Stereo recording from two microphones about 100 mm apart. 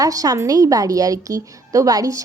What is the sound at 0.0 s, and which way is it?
Speech, 35° right (ahead or behind).